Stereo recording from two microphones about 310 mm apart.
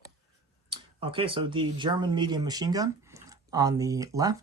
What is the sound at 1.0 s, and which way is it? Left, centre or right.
Speech, centre.